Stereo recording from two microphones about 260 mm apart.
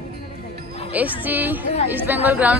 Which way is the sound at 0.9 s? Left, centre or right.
Centre.